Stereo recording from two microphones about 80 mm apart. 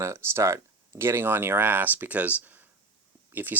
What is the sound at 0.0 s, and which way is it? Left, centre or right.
Speech, right.